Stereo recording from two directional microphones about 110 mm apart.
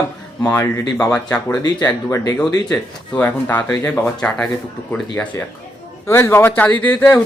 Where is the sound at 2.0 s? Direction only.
30° left (ahead or behind).